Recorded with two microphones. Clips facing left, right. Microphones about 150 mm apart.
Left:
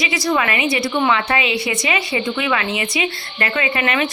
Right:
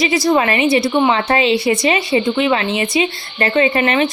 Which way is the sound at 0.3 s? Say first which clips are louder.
Right 4 dB; 30° right (ahead or behind).